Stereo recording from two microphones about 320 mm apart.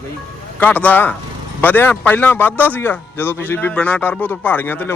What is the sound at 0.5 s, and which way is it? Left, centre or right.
A man's voice, centre.